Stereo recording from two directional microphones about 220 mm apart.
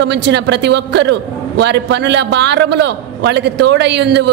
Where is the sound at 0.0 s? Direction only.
50° right (ahead or behind).